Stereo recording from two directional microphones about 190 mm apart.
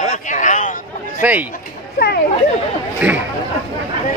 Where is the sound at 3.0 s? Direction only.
5° right (ahead or behind).